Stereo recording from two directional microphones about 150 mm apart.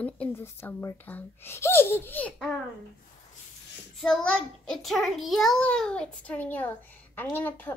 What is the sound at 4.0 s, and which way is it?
A child's voice, 5° left (ahead or behind).